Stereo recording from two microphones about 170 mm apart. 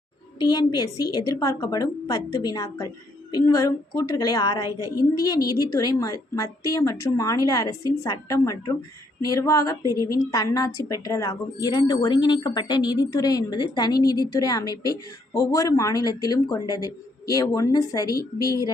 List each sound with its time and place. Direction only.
0.3 s a woman's voice: 25° left (ahead or behind)
9.8 s a woman's voice: 20° right (ahead or behind)
10.1 s a woman's voice: 20° left (ahead or behind)